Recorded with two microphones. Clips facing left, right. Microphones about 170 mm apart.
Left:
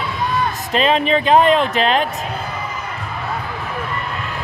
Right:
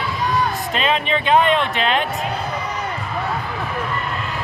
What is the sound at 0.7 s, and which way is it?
Speech, 40° left (ahead or behind).